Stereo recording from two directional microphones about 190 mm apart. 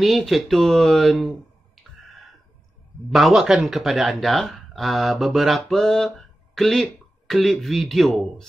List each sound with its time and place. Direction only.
0.0 s speech: centre (ahead or behind)
3.1 s speech: centre (ahead or behind)